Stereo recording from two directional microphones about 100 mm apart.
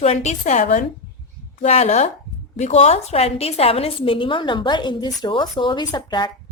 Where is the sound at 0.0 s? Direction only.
90° left.